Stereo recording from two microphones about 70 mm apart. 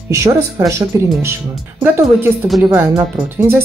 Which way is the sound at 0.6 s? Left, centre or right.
Right.